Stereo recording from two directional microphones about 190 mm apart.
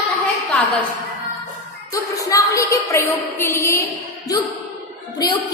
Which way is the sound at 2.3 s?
15° left (ahead or behind).